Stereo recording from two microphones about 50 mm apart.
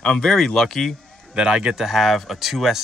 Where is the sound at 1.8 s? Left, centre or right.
Centre.